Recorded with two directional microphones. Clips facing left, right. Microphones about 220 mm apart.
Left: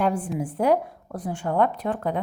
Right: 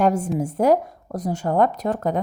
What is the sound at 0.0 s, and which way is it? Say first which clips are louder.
A woman's voice: right 4 dB; 40° right (ahead or behind).